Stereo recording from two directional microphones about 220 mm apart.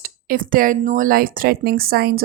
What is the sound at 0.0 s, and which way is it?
Speech, 40° right (ahead or behind).